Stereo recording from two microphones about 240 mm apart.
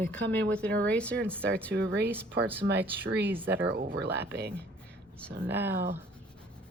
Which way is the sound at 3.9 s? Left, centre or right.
Right.